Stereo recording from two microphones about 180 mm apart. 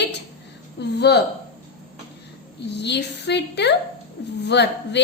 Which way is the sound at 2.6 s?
70° left (ahead or behind).